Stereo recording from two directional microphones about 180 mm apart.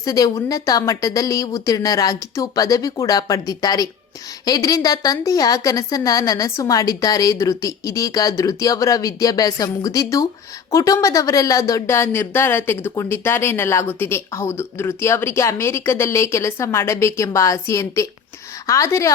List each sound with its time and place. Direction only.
0.0 s a woman's voice: 20° left (ahead or behind)